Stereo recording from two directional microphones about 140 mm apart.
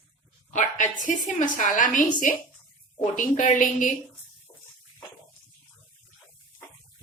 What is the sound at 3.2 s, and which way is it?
Speech, 65° left (ahead or behind).